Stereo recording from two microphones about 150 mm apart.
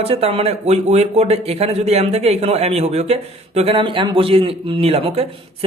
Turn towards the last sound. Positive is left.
turn(degrees=-40)  # may be behind; listen again after turning